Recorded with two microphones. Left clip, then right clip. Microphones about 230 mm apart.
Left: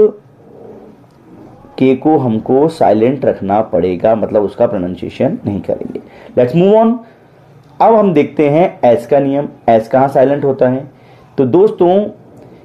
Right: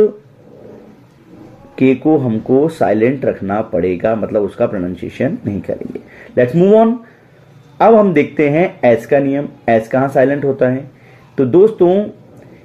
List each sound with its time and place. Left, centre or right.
1.8 s speech: centre